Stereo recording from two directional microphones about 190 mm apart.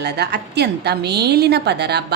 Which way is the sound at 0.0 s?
60° right (ahead or behind).